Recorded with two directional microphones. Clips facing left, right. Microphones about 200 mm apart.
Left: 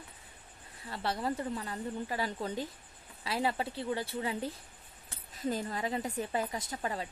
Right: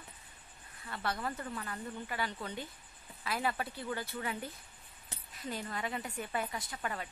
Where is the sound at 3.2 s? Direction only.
30° left (ahead or behind).